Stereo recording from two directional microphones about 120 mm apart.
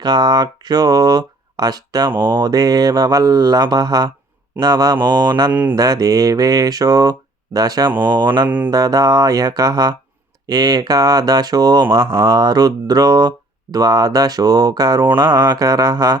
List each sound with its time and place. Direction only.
0.0 s speech: 35° right (ahead or behind)
5.5 s speech: 15° right (ahead or behind)
5.7 s speech: 30° right (ahead or behind)
8.4 s speech: 15° right (ahead or behind)
8.7 s speech: 30° right (ahead or behind)